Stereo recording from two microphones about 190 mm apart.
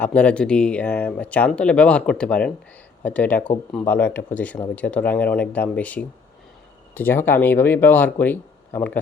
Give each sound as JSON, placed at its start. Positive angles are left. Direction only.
{"t": 0.0, "sound": "speech", "side_deg": 5}